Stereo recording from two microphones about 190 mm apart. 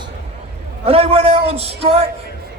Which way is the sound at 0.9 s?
30° right (ahead or behind).